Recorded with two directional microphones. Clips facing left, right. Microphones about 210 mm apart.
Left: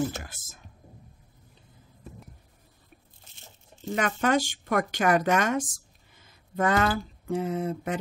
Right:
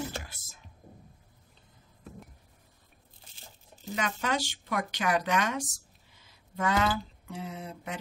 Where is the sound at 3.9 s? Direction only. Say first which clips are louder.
Left 7 dB; 50° left (ahead or behind).